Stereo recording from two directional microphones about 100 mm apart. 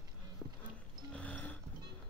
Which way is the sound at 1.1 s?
15° left (ahead or behind).